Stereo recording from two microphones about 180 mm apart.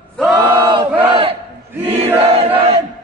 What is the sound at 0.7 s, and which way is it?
Battle cry, 30° right (ahead or behind).